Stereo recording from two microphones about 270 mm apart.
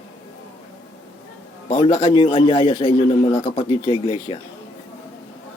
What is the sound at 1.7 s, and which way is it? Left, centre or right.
A man's voice, centre.